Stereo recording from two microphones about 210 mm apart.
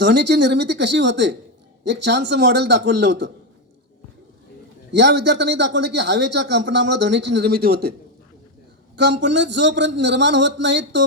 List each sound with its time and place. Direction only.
0.0 s a man's voice: 55° right (ahead or behind)
4.9 s a man's voice: 55° right (ahead or behind)
9.0 s a man's voice: 55° right (ahead or behind)